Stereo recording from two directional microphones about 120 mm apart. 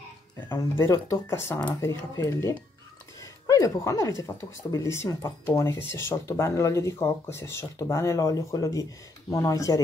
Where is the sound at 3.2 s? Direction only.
25° left (ahead or behind).